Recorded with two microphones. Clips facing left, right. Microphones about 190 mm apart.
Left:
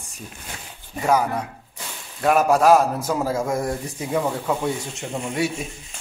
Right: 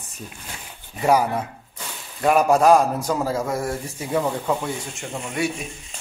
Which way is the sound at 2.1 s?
Centre (ahead or behind).